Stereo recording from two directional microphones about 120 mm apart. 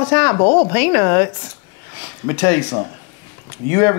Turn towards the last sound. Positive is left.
turn(degrees=25)  # may be behind; listen again after turning